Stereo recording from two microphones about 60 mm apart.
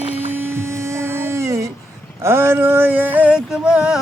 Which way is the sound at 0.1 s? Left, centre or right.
Right.